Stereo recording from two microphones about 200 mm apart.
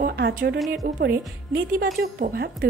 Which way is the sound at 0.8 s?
45° right (ahead or behind).